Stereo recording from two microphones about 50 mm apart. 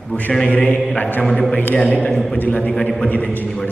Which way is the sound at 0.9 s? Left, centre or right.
Left.